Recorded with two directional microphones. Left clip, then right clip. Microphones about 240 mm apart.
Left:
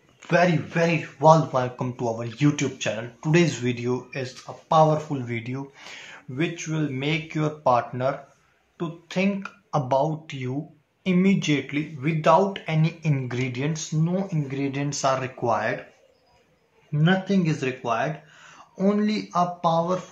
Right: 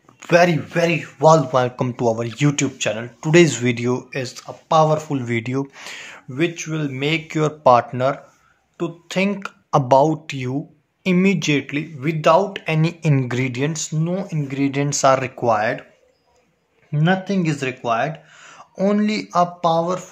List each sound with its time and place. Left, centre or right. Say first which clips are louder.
0.2 s speech: right 6 dB; right
16.9 s speech: right 3 dB; right